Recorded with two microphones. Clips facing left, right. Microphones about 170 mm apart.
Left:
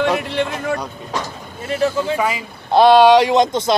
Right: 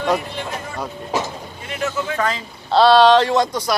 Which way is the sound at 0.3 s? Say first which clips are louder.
Left 8 dB; 75° left (ahead or behind).